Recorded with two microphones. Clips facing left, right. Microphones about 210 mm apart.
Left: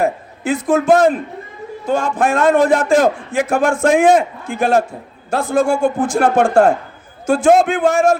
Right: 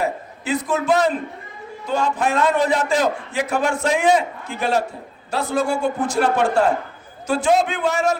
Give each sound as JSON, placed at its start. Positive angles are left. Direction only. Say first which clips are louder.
{"t": 0.0, "sound": "a man's voice", "louder": "left 6 dB", "side_deg": 50}